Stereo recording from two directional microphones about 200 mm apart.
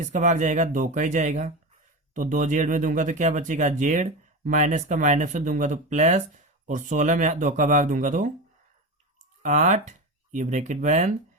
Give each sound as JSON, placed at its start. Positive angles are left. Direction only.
{"t": 0.0, "sound": "speech", "side_deg": -40}
{"t": 9.4, "sound": "speech", "side_deg": -40}